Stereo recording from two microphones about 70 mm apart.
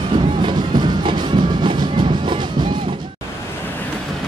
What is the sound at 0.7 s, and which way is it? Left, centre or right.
Music, right.